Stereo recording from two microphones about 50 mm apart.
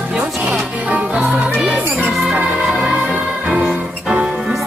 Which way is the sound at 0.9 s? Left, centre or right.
Right.